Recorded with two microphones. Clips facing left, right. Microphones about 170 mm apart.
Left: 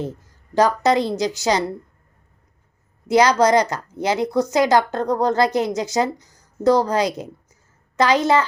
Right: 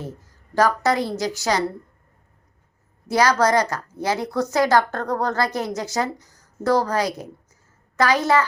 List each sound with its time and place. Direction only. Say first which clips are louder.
0.5 s a woman's voice: left 3 dB; 20° left (ahead or behind)
3.1 s a woman's voice: left 3 dB; 20° left (ahead or behind)